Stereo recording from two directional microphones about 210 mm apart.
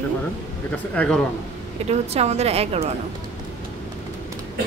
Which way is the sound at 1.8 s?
30° right (ahead or behind).